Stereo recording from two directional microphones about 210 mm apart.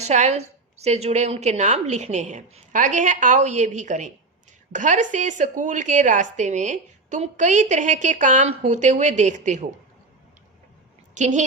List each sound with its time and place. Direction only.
0.0 s a woman's voice: 30° right (ahead or behind)
11.1 s a woman's voice: 35° right (ahead or behind)